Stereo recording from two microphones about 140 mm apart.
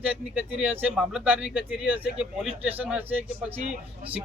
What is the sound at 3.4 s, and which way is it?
Speech, 45° right (ahead or behind).